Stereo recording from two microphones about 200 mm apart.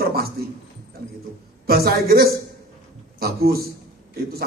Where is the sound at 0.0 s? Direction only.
50° right (ahead or behind).